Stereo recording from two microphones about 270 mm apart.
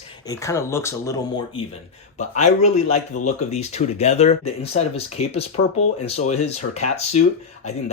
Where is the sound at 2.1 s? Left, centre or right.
Left.